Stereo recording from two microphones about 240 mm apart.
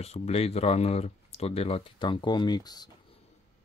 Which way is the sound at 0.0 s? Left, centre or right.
Left.